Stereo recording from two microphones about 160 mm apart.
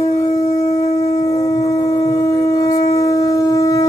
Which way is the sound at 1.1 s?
20° left (ahead or behind).